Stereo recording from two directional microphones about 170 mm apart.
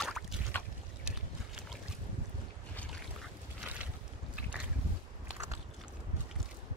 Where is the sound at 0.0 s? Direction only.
5° left (ahead or behind).